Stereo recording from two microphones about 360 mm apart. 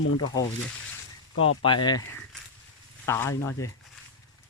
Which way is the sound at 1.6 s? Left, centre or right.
Centre.